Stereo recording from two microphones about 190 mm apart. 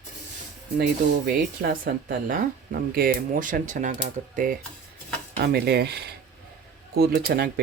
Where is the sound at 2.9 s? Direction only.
45° right (ahead or behind).